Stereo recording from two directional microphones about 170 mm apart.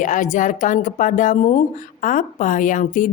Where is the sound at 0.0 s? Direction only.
50° left (ahead or behind).